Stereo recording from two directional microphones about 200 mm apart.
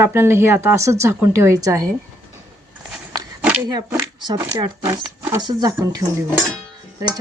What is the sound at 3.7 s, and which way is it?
Speech, 20° right (ahead or behind).